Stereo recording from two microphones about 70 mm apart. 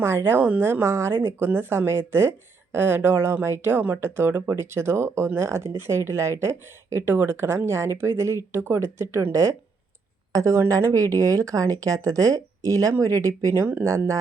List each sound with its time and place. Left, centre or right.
0.0 s speech: right